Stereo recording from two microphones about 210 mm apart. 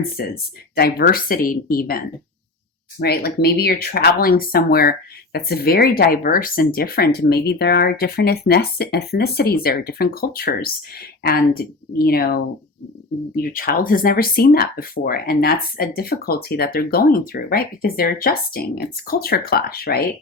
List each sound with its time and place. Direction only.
0.2 s speech: 45° left (ahead or behind)
13.3 s speech: 45° left (ahead or behind)